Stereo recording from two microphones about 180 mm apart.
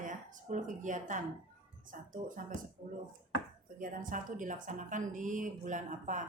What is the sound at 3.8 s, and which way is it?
Speech, 45° right (ahead or behind).